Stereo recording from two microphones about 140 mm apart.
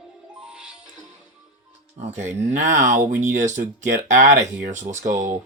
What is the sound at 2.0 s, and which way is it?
Speech, 60° right (ahead or behind).